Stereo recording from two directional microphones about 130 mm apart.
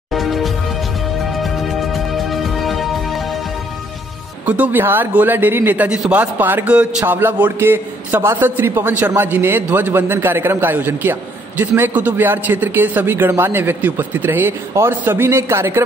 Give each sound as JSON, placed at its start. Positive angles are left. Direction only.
{"t": 0.1, "sound": "music", "side_deg": 0}
{"t": 4.5, "sound": "a man's voice", "side_deg": -15}